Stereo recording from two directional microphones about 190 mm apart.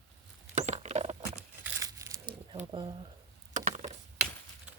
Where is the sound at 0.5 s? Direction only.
35° right (ahead or behind).